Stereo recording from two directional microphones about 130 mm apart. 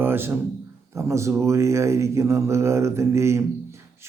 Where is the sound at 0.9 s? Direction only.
20° right (ahead or behind).